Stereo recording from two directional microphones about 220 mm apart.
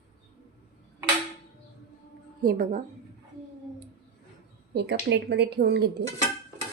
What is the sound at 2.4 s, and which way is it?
Speech, 40° right (ahead or behind).